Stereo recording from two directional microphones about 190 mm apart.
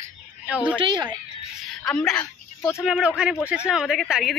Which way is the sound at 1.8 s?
5° left (ahead or behind).